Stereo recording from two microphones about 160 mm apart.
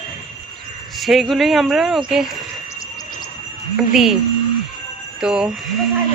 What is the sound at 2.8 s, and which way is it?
Cricket, 25° left (ahead or behind).